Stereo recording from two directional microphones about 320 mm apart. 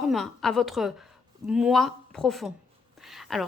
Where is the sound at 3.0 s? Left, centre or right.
Centre.